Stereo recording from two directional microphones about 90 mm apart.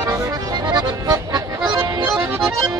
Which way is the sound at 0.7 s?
45° right (ahead or behind).